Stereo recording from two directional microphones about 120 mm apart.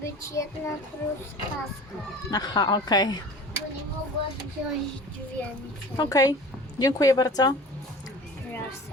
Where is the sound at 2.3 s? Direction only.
35° left (ahead or behind).